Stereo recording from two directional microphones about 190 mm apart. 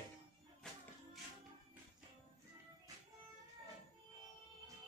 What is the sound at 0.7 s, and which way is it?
Music, 5° left (ahead or behind).